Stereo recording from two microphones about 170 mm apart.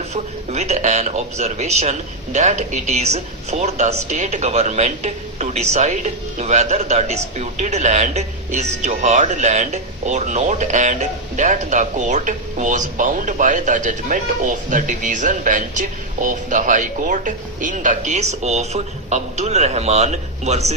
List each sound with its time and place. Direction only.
0.1 s a man's voice: 40° right (ahead or behind)